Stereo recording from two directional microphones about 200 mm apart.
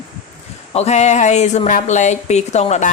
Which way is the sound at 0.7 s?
35° left (ahead or behind).